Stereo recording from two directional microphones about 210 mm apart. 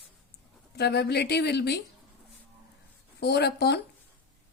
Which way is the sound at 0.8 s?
50° left (ahead or behind).